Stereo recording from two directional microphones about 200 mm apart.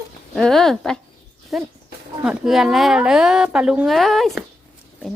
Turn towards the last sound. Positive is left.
turn(degrees=0)  # may be behind; listen again after turning